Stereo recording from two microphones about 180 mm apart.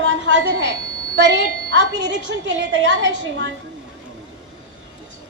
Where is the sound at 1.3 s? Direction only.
90° right.